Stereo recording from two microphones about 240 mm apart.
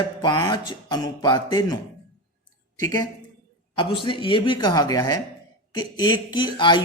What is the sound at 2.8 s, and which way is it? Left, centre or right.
A man's voice, centre.